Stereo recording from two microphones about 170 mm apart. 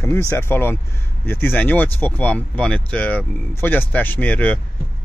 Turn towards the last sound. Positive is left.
turn(degrees=10)  # may be behind; listen again after turning